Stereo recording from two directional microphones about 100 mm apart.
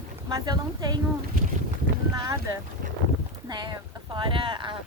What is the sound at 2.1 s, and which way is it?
Speech, 40° right (ahead or behind).